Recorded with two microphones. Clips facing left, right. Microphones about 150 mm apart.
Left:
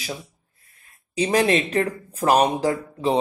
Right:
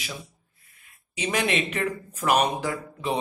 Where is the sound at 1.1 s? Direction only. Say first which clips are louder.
Left 6 dB; 35° left (ahead or behind).